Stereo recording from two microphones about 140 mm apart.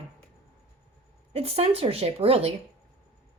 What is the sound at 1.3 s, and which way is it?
A woman's voice, 45° right (ahead or behind).